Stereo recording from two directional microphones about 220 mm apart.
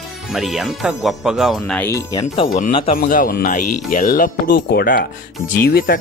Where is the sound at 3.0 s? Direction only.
40° left (ahead or behind).